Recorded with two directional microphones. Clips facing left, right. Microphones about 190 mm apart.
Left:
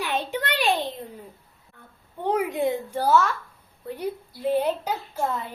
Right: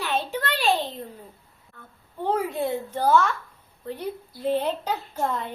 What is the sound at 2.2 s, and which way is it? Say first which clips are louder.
A woman's voice: left 2 dB; 15° left (ahead or behind).